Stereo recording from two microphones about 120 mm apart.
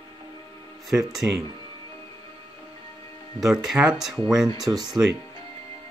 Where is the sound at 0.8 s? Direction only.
Centre (ahead or behind).